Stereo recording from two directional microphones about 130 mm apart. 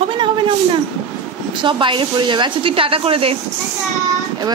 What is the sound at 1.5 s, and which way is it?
Speech, 40° right (ahead or behind).